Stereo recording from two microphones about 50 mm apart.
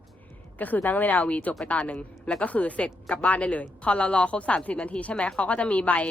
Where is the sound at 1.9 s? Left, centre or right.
Centre.